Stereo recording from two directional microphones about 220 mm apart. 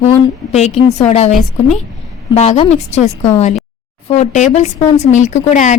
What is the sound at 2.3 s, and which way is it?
Speech, 30° left (ahead or behind).